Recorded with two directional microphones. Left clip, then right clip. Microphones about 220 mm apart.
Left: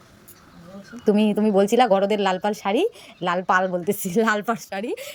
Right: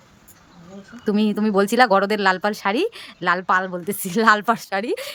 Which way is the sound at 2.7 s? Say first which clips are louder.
Left 1 dB; 40° right (ahead or behind).